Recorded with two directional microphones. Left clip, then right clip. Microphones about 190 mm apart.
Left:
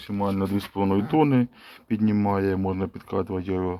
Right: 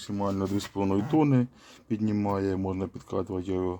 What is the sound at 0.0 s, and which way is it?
Speech, centre (ahead or behind).